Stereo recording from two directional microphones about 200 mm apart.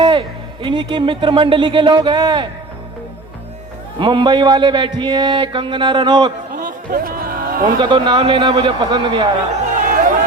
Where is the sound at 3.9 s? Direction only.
25° right (ahead or behind).